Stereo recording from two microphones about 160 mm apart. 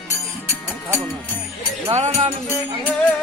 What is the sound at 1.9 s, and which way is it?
Music, 45° right (ahead or behind).